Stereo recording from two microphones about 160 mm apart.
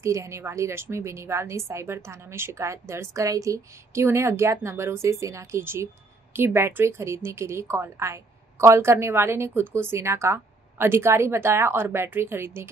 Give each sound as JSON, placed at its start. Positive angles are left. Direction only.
{"t": 0.0, "sound": "a woman's voice", "side_deg": -20}